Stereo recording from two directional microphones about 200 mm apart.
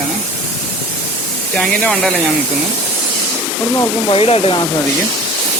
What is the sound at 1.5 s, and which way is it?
Speech, centre (ahead or behind).